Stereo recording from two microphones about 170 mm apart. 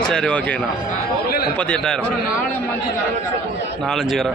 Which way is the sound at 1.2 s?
65° left (ahead or behind).